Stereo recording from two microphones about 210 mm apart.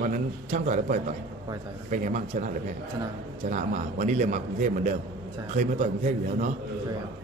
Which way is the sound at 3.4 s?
35° right (ahead or behind).